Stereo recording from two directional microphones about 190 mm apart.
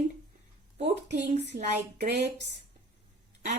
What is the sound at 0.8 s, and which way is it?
Speech, 40° right (ahead or behind).